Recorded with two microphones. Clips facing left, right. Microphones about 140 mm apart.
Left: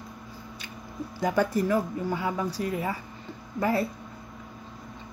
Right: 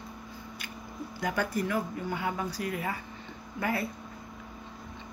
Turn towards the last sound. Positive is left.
turn(degrees=35)  # may be behind; listen again after turning